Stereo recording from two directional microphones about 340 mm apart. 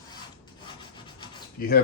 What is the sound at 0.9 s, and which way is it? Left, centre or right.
Rub, centre.